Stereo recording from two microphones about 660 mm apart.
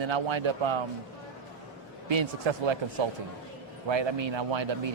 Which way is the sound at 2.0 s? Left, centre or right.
Right.